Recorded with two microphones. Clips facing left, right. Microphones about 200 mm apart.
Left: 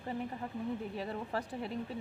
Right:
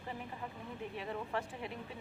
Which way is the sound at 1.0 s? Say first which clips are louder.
Left 2 dB; 35° left (ahead or behind).